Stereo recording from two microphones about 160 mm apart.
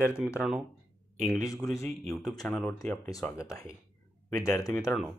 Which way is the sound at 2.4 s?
10° left (ahead or behind).